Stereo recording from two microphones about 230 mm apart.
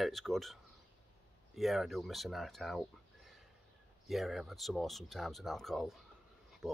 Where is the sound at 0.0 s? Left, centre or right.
Centre.